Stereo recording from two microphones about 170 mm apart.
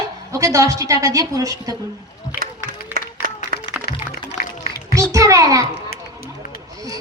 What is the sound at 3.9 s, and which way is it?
Music, 70° left (ahead or behind).